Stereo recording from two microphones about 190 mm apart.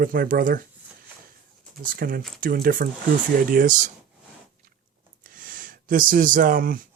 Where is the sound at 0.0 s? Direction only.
50° right (ahead or behind).